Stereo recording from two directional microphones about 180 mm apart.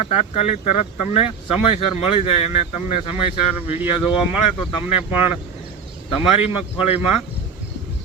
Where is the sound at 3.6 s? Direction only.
30° left (ahead or behind).